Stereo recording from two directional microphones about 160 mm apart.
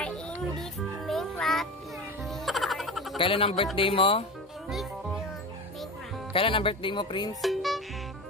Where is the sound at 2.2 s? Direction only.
Centre (ahead or behind).